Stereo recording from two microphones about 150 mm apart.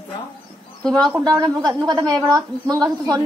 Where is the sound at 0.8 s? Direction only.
5° left (ahead or behind).